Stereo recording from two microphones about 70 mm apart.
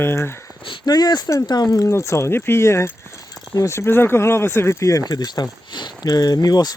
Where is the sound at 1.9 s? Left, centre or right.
Left.